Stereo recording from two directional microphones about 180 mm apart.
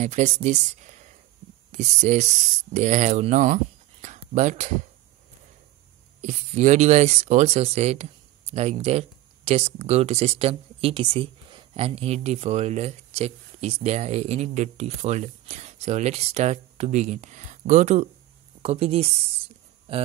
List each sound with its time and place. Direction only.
0.0 s speech: 40° right (ahead or behind)
6.2 s speech: 40° right (ahead or behind)
19.9 s a sound: 35° right (ahead or behind)